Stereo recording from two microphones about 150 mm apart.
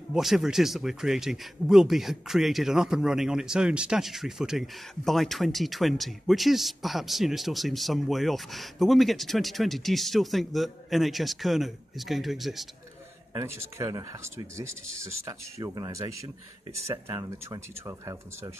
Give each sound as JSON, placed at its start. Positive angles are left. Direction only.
{"t": 0.1, "sound": "speech", "side_deg": 0}
{"t": 13.3, "sound": "speech", "side_deg": -15}